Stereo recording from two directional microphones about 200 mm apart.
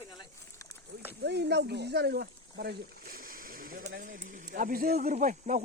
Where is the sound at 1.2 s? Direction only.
55° right (ahead or behind).